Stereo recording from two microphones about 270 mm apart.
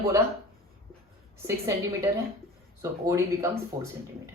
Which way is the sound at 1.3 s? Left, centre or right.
Centre.